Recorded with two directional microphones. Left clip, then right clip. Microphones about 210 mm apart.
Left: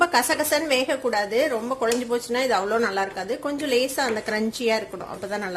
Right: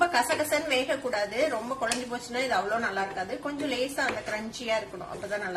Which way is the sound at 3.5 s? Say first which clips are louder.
Left 9 dB; 40° left (ahead or behind).